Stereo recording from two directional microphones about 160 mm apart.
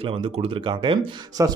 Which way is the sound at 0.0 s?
35° right (ahead or behind).